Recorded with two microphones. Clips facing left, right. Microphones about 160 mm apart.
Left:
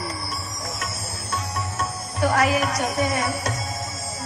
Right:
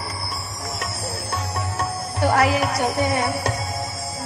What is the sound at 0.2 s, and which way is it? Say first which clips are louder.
Music: right 1 dB; 70° right (ahead or behind).